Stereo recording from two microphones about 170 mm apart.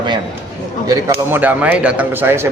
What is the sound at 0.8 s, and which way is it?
A man's voice, 10° right (ahead or behind).